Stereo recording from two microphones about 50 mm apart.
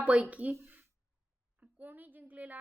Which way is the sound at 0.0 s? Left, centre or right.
Right.